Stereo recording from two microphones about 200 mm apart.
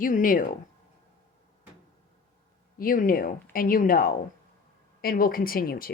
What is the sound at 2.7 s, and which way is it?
Speech, 45° left (ahead or behind).